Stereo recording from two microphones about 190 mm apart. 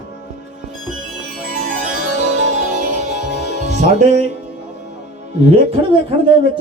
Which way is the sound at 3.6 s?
35° right (ahead or behind).